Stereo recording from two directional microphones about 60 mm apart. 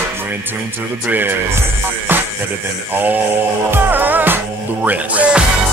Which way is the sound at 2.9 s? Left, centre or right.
Right.